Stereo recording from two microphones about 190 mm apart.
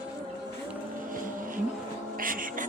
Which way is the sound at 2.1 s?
45° right (ahead or behind).